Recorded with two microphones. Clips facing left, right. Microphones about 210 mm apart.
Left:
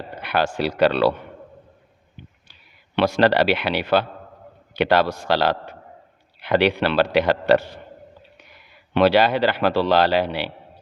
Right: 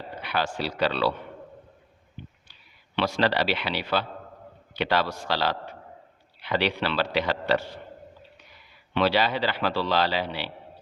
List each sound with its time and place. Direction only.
0.2 s speech: 60° left (ahead or behind)
2.5 s a man's voice: 60° left (ahead or behind)
8.9 s speech: 55° left (ahead or behind)